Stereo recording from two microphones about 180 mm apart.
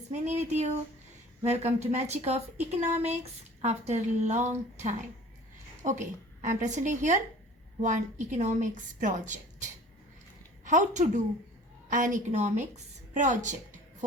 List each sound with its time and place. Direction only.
0.1 s a woman's voice: 40° right (ahead or behind)